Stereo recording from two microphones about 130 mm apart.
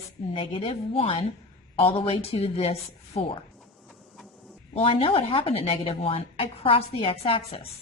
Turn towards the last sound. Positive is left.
turn(degrees=50)  # may be behind; listen again after turning